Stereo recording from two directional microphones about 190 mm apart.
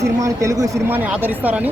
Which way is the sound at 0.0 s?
15° right (ahead or behind).